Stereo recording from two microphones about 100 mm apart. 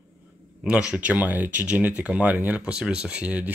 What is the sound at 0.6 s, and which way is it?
Speech, 10° right (ahead or behind).